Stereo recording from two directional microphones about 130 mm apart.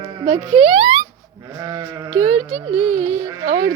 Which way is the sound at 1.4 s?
25° right (ahead or behind).